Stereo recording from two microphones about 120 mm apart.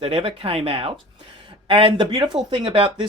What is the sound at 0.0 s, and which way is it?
Speech, 50° right (ahead or behind).